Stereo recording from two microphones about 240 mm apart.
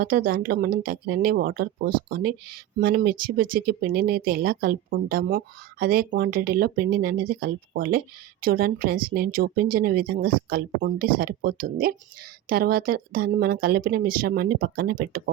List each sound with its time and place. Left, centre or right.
0.0 s speech: right